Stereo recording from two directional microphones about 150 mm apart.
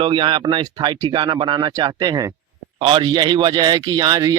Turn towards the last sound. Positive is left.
turn(degrees=-25)  # may be behind; listen again after turning